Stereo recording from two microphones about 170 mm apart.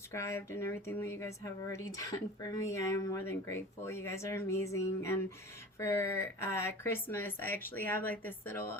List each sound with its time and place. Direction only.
0.1 s speech: 15° left (ahead or behind)